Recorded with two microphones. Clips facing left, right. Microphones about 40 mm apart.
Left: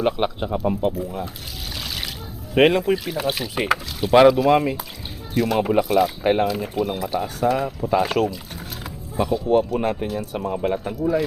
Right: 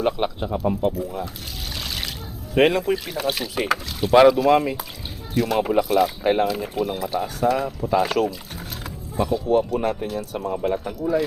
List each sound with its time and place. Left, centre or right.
0.0 s speech: centre
1.7 s splash: centre
2.6 s speech: centre
3.5 s speech: centre
9.2 s speech: left